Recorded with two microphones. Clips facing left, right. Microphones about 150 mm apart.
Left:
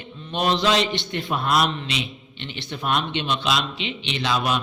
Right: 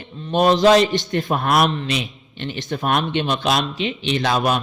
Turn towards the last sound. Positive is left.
turn(degrees=-45)  # may be behind; listen again after turning